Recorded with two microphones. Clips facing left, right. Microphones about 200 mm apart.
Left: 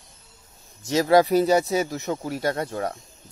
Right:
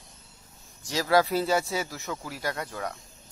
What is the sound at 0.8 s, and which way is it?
A man's voice, 20° left (ahead or behind).